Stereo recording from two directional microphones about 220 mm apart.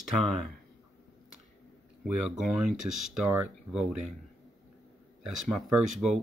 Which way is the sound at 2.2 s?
Centre (ahead or behind).